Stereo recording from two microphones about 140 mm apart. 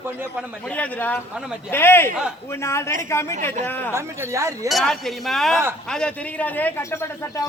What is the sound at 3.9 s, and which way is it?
Speech, 20° right (ahead or behind).